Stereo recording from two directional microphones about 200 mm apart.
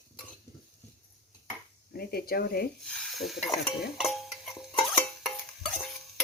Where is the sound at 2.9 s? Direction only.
Centre (ahead or behind).